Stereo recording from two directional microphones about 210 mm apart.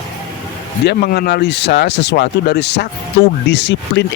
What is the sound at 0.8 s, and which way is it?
Speech, 50° left (ahead or behind).